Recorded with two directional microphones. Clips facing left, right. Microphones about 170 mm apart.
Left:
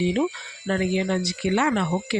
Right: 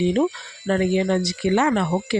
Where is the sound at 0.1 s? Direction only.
40° right (ahead or behind).